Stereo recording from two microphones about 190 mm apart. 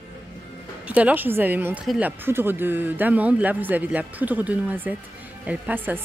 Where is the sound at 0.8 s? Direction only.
10° right (ahead or behind).